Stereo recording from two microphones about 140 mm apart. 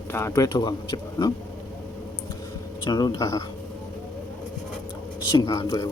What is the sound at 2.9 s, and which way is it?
Speech, 30° left (ahead or behind).